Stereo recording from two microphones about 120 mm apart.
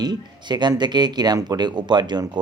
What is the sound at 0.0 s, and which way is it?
Speech, 35° right (ahead or behind).